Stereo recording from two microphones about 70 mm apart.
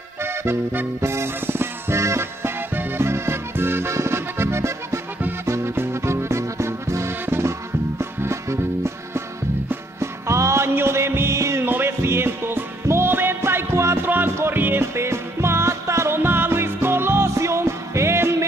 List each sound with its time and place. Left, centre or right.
0.2 s music: right
11.6 s music: right
14.0 s music: right